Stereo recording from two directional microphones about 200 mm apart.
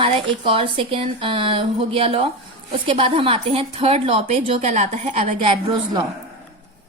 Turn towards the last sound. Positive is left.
turn(degrees=-25)  # may be behind; listen again after turning